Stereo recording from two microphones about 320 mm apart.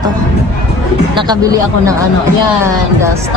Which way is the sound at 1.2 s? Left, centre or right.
Centre.